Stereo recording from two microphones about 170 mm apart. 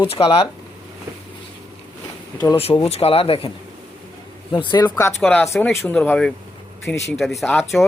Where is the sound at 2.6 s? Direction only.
35° left (ahead or behind).